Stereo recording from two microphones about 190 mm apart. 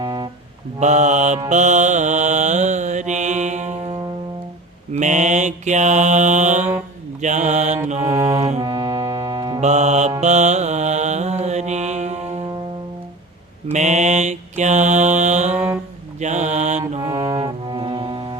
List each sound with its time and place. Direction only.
0.0 s music: 20° right (ahead or behind)
0.8 s mantra: 40° right (ahead or behind)
4.9 s mantra: 40° right (ahead or behind)
8.3 s music: 35° right (ahead or behind)
8.6 s music: 20° right (ahead or behind)
9.6 s mantra: 35° right (ahead or behind)
13.7 s mantra: 40° right (ahead or behind)
17.0 s music: 20° right (ahead or behind)